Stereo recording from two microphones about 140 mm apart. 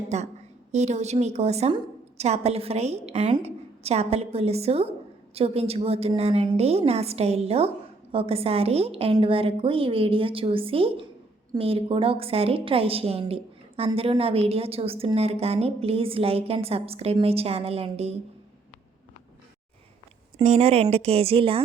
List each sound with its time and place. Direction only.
0.1 s a woman's voice: 55° right (ahead or behind)
20.4 s a woman's voice: 50° right (ahead or behind)